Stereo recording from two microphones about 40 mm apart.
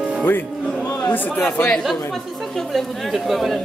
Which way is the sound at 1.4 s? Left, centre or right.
Left.